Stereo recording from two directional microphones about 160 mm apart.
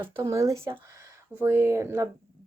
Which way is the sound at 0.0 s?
20° right (ahead or behind).